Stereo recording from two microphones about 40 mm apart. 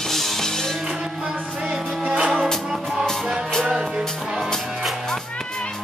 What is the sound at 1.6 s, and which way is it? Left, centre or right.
Music, right.